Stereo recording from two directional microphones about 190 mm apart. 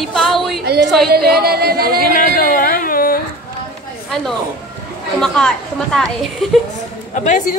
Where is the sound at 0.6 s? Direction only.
55° right (ahead or behind).